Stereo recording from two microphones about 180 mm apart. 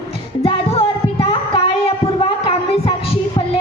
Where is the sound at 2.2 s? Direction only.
30° left (ahead or behind).